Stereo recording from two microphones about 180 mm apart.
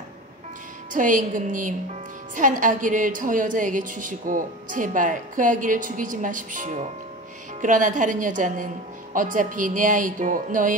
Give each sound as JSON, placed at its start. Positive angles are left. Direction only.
{"t": 0.9, "sound": "a woman's voice", "side_deg": -45}